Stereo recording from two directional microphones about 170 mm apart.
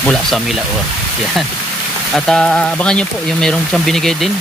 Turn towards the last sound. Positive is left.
turn(degrees=0)  # may be behind; listen again after turning